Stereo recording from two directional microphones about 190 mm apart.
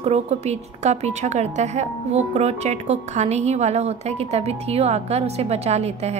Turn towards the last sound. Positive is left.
turn(degrees=-35)  # may be behind; listen again after turning